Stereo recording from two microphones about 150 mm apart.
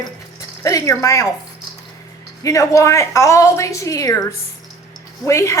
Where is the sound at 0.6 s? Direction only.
20° left (ahead or behind).